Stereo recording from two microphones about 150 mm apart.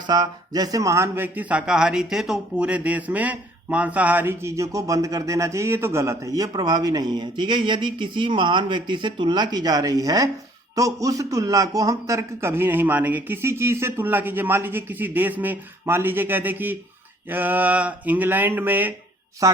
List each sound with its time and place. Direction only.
0.1 s a man's voice: 25° right (ahead or behind)